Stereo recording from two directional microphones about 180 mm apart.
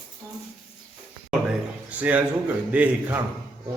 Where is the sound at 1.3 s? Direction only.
5° right (ahead or behind).